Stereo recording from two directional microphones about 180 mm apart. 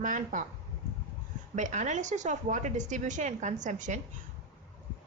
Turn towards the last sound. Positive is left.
turn(degrees=-45)  # may be behind; listen again after turning